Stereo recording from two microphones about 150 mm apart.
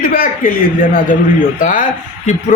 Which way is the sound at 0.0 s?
65° left (ahead or behind).